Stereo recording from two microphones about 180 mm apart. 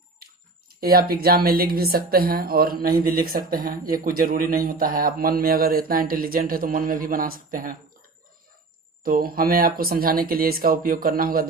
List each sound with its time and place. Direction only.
0.8 s a woman's voice: 55° right (ahead or behind)
9.0 s a woman's voice: 55° right (ahead or behind)